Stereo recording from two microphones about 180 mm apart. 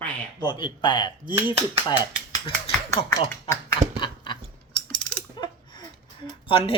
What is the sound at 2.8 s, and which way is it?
Speech, 15° left (ahead or behind).